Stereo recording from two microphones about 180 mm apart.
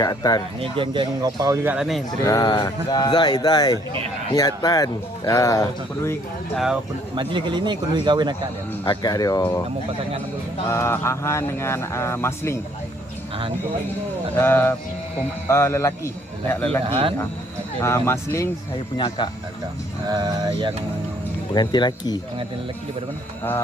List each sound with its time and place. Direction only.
0.0 s speech: 20° left (ahead or behind)
0.6 s a man's voice: 25° right (ahead or behind)
1.7 s speech: centre (ahead or behind)
2.2 s speech: 20° left (ahead or behind)
7.2 s a man's voice: 25° right (ahead or behind)
8.9 s speech: 20° left (ahead or behind)
10.7 s speech: 15° left (ahead or behind)
14.3 s speech: 10° left (ahead or behind)
16.9 s a man's voice: 30° right (ahead or behind)
17.7 s speech: 15° left (ahead or behind)
18.9 s speech: 25° left (ahead or behind)
20.1 s a man's voice: 20° right (ahead or behind)
21.5 s speech: 25° left (ahead or behind)